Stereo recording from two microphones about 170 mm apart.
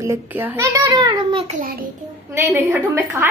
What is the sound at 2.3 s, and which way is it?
Speech, 15° right (ahead or behind).